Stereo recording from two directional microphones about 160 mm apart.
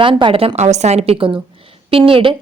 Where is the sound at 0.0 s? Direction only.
30° right (ahead or behind).